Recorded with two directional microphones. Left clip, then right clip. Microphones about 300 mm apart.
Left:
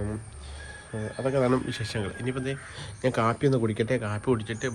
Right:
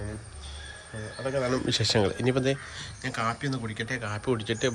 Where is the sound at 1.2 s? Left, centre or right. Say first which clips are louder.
Left 3 dB; centre.